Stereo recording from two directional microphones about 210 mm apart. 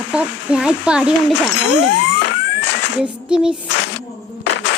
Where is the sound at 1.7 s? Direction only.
60° left (ahead or behind).